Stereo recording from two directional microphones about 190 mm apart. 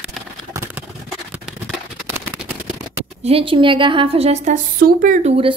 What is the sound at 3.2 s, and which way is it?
Speech, 30° right (ahead or behind).